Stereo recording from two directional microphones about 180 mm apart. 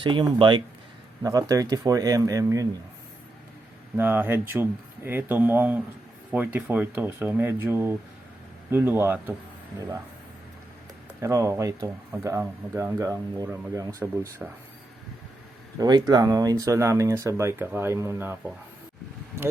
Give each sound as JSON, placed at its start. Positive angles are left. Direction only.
{"t": 0.0, "sound": "speech", "side_deg": -25}
{"t": 3.9, "sound": "speech", "side_deg": -10}
{"t": 11.2, "sound": "speech", "side_deg": -15}
{"t": 15.8, "sound": "speech", "side_deg": -20}